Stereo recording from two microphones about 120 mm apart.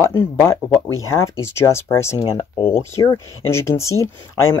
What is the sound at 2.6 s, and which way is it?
Speech, 50° left (ahead or behind).